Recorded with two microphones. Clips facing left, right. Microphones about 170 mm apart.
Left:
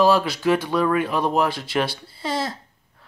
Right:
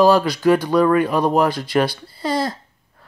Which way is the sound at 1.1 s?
40° right (ahead or behind).